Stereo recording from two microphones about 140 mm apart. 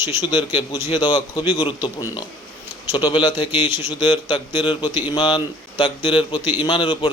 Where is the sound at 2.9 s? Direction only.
35° left (ahead or behind).